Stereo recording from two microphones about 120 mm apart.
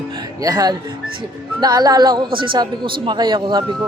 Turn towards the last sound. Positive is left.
turn(degrees=-40)  # may be behind; listen again after turning